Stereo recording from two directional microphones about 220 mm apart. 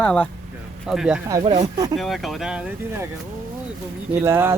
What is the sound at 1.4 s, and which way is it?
Speech, 30° right (ahead or behind).